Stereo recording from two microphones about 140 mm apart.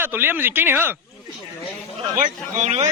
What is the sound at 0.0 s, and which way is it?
Speech, 15° right (ahead or behind).